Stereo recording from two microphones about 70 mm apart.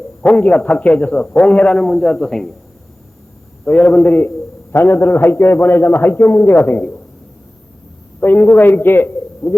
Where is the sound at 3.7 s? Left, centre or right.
Left.